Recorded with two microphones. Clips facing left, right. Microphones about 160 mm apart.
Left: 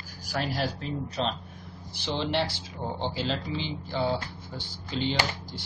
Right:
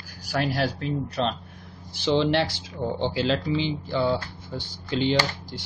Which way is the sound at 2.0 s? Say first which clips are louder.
Right 8 dB; 85° right.